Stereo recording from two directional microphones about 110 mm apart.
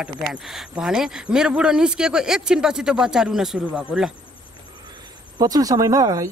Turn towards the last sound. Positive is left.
turn(degrees=-30)  # may be behind; listen again after turning